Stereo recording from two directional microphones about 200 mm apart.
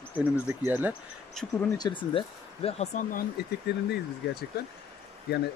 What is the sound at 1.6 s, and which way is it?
Speech, 20° left (ahead or behind).